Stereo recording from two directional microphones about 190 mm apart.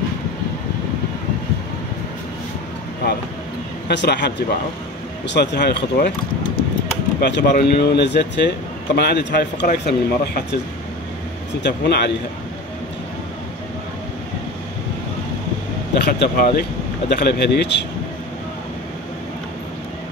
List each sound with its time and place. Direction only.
3.9 s speech: 65° left (ahead or behind)
7.2 s speech: 65° left (ahead or behind)
11.6 s speech: 60° left (ahead or behind)
16.1 s speech: 55° left (ahead or behind)